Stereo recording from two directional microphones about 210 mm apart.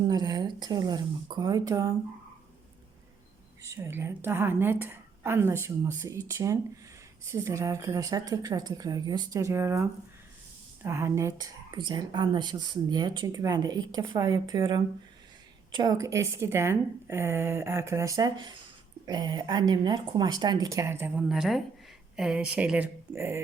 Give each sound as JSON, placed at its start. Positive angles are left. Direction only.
{"t": 0.1, "sound": "speech", "side_deg": -20}
{"t": 3.6, "sound": "a woman's voice", "side_deg": -15}
{"t": 10.8, "sound": "a woman's voice", "side_deg": -10}